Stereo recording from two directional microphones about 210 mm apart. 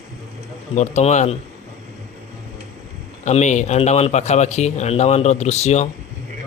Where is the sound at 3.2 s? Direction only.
35° left (ahead or behind).